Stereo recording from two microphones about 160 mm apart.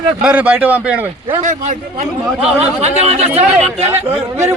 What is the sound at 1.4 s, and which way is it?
A man's voice, 50° right (ahead or behind).